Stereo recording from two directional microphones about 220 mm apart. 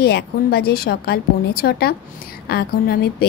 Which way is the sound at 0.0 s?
45° left (ahead or behind).